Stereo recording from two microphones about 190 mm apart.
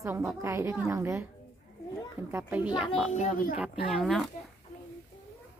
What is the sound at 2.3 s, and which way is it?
Speech, 10° right (ahead or behind).